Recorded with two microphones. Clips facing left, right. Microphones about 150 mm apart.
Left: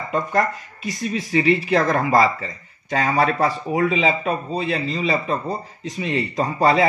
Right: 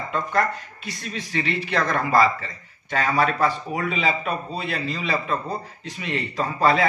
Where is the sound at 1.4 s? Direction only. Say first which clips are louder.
Left 6 dB; 45° left (ahead or behind).